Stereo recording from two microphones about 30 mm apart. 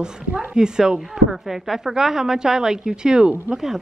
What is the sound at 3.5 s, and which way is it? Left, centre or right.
Speech, centre.